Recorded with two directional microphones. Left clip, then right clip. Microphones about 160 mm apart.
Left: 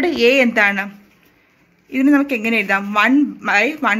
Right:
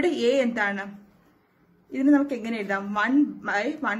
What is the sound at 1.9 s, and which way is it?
A woman's voice, 30° left (ahead or behind).